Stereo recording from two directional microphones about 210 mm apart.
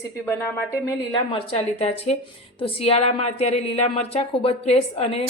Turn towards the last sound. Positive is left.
turn(degrees=30)  # may be behind; listen again after turning